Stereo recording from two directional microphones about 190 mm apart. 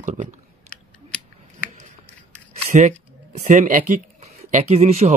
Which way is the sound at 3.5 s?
40° right (ahead or behind).